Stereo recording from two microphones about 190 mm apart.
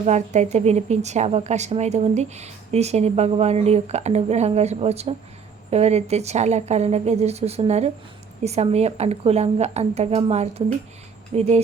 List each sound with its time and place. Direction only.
0.0 s a woman's voice: 35° right (ahead or behind)